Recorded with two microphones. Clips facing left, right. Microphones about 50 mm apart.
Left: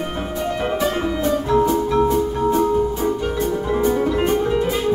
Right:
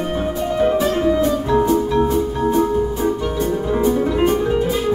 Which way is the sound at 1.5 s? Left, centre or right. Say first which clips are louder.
Right 1 dB; right.